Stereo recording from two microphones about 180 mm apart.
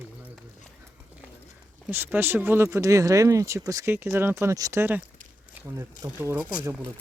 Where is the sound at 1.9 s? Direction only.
10° right (ahead or behind).